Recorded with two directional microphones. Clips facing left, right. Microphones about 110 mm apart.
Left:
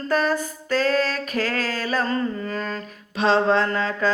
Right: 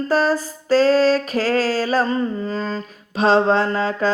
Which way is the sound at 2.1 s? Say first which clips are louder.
Right 3 dB; 20° right (ahead or behind).